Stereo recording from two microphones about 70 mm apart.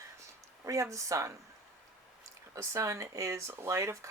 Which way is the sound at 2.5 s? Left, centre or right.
Right.